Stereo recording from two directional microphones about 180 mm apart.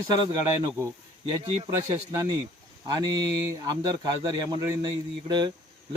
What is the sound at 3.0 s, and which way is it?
A man's voice, 20° right (ahead or behind).